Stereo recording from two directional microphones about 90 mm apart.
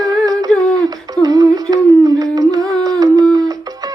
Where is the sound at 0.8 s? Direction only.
45° right (ahead or behind).